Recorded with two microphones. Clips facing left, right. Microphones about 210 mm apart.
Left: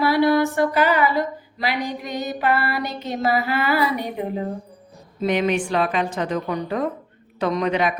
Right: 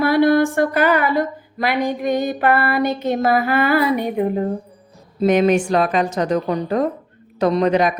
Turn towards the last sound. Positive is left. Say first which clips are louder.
# right 5 dB
turn(degrees=-40)  # may be behind; listen again after turning